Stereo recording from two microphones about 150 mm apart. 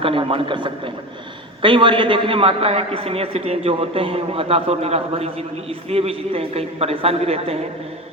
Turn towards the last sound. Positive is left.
turn(degrees=-40)  # may be behind; listen again after turning